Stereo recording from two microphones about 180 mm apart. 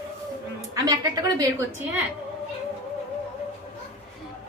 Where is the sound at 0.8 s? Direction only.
20° right (ahead or behind).